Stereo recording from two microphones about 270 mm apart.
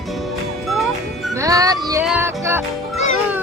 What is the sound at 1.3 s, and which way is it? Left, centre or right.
Music, centre.